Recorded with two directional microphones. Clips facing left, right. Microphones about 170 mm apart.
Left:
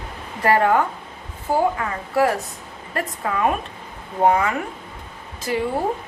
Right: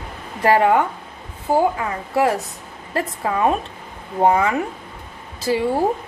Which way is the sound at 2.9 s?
25° right (ahead or behind).